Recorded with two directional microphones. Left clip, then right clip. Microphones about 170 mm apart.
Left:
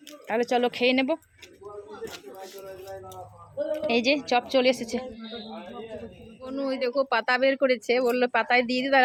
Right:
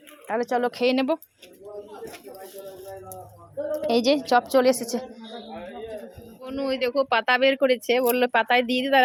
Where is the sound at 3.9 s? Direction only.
15° right (ahead or behind).